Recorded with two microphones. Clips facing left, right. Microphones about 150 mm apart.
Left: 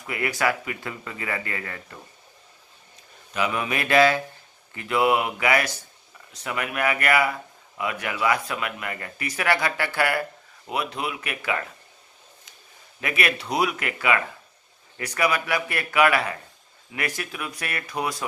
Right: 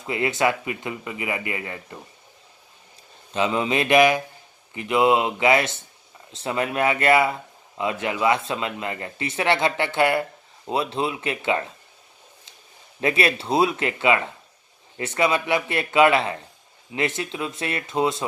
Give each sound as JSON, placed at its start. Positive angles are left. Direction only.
{"t": 0.0, "sound": "speech", "side_deg": -25}
{"t": 3.3, "sound": "speech", "side_deg": -25}
{"t": 13.0, "sound": "speech", "side_deg": -30}